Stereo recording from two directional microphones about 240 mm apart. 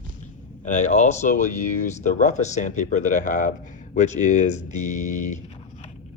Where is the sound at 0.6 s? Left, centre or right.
Left.